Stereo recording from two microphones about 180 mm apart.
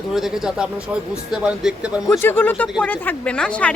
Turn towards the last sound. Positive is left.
turn(degrees=5)  # may be behind; listen again after turning